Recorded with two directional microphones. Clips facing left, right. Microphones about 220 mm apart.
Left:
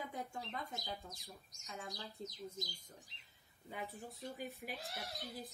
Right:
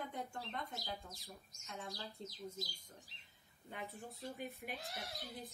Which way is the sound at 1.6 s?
Centre (ahead or behind).